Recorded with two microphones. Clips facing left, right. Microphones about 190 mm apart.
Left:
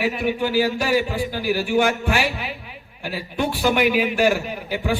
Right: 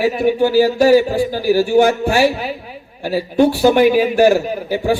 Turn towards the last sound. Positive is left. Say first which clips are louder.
# right 7 dB
turn(degrees=-35)  # may be behind; listen again after turning